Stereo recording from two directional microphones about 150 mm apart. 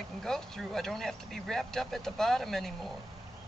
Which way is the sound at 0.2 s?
Centre (ahead or behind).